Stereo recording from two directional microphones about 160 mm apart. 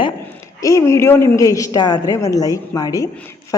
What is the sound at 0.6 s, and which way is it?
A woman's voice, 20° left (ahead or behind).